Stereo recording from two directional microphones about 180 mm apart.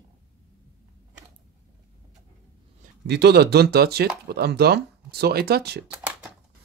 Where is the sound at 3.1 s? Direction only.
65° right (ahead or behind).